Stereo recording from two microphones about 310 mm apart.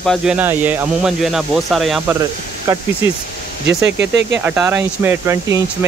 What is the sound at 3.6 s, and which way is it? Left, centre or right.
Speech, right.